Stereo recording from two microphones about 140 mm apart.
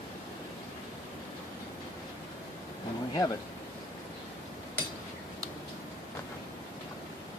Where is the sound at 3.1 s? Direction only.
25° left (ahead or behind).